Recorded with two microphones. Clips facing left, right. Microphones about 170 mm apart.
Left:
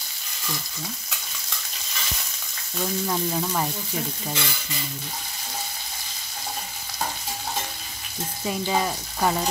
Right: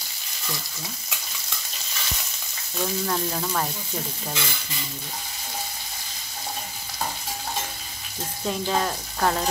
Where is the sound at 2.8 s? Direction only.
5° left (ahead or behind).